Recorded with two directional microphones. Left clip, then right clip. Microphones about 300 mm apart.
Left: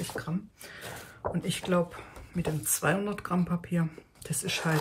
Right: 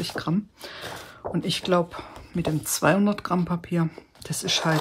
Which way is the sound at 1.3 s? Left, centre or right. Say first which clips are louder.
Right 7 dB; centre.